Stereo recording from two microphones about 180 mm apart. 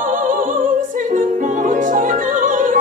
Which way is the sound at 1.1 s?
45° right (ahead or behind).